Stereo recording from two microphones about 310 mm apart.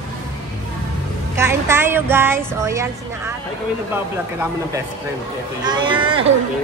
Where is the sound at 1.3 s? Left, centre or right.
Centre.